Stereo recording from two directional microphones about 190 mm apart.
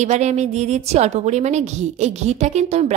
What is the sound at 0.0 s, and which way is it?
A woman's voice, 35° right (ahead or behind).